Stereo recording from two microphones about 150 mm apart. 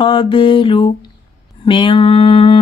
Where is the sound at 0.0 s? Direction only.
35° left (ahead or behind).